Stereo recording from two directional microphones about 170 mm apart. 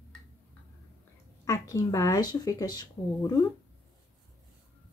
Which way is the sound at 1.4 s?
20° left (ahead or behind).